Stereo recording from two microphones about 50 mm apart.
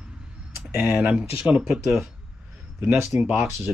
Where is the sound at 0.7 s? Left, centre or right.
Right.